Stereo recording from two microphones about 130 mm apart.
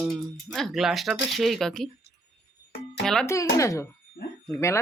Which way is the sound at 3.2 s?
25° left (ahead or behind).